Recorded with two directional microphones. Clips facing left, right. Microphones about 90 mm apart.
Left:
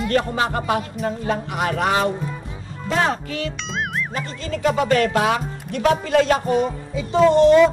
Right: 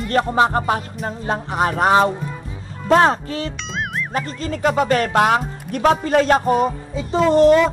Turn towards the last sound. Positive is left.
turn(degrees=-40)  # may be behind; listen again after turning